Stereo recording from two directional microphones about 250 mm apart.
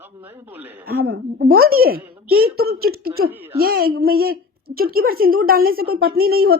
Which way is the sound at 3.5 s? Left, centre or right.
Right.